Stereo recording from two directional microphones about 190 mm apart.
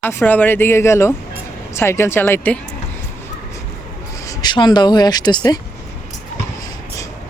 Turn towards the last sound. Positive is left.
turn(degrees=20)  # may be behind; listen again after turning